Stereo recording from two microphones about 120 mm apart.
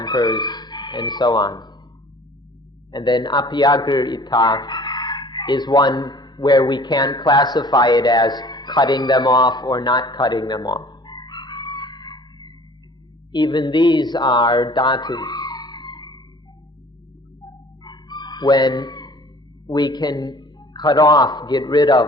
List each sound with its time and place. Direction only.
0.0 s speech: 35° left (ahead or behind)
2.9 s a man's voice: 35° left (ahead or behind)
17.4 s chicken: 35° left (ahead or behind)
19.6 s a man's voice: 35° left (ahead or behind)